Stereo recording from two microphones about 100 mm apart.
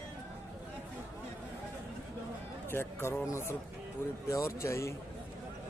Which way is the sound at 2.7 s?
25° left (ahead or behind).